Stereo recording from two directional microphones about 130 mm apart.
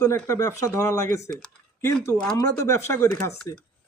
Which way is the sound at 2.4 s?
25° left (ahead or behind).